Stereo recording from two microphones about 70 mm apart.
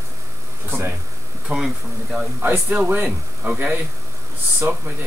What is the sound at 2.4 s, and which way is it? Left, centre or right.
Speech, right.